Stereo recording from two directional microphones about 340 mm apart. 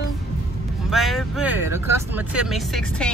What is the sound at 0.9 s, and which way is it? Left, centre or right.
Speech, centre.